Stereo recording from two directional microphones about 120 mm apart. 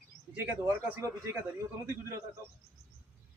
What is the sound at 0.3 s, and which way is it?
A man's voice, 15° right (ahead or behind).